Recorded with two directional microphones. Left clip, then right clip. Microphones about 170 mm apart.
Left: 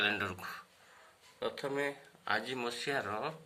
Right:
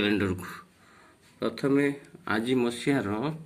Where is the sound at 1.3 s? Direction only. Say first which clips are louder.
Right 10 dB; 20° right (ahead or behind).